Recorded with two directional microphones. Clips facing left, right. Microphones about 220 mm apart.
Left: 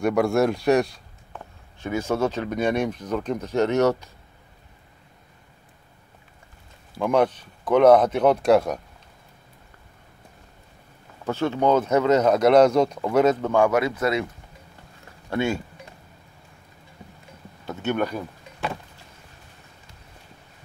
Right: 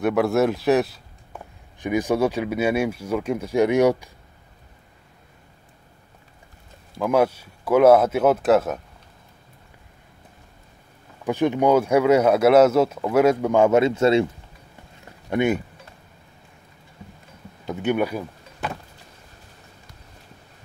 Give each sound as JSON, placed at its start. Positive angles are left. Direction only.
{"t": 0.0, "sound": "a man's voice", "side_deg": 0}
{"t": 1.8, "sound": "speech", "side_deg": -15}
{"t": 7.0, "sound": "speech", "side_deg": -5}
{"t": 11.2, "sound": "speech", "side_deg": -15}
{"t": 15.2, "sound": "speech", "side_deg": -20}
{"t": 17.6, "sound": "power windows", "side_deg": -10}